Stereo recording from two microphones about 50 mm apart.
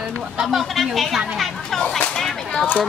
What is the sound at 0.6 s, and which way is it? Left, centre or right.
Speech, centre.